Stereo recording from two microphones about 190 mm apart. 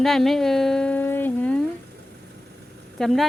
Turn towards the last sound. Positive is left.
turn(degrees=0)  # may be behind; listen again after turning